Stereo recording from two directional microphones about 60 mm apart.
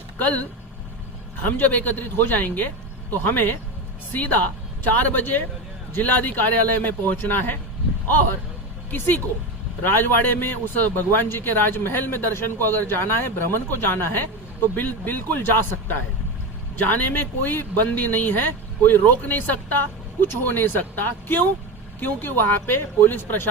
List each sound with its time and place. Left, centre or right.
0.2 s speech: left
1.5 s a man's voice: left
8.9 s a man's voice: left